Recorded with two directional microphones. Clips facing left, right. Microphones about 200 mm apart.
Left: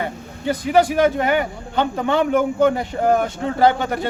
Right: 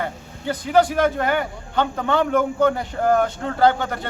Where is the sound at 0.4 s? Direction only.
10° left (ahead or behind).